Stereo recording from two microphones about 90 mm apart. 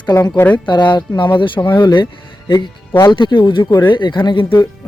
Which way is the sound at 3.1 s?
60° left (ahead or behind).